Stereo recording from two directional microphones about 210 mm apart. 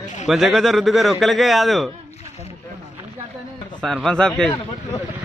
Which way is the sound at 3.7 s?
5° left (ahead or behind).